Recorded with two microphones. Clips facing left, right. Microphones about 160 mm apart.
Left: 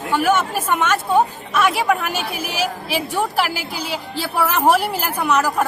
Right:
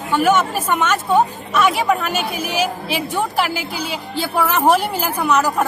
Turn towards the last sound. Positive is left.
turn(degrees=5)  # may be behind; listen again after turning